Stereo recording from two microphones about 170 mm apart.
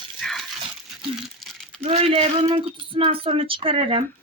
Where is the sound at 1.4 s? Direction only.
Centre (ahead or behind).